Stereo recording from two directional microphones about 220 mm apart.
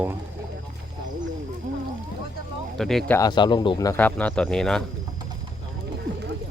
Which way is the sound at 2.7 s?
Centre (ahead or behind).